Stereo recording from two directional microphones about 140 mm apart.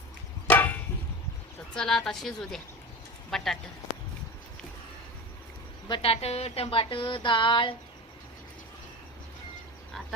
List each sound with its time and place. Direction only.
0.4 s a sound: 15° left (ahead or behind)
1.7 s a woman's voice: 5° left (ahead or behind)
5.9 s speech: 45° left (ahead or behind)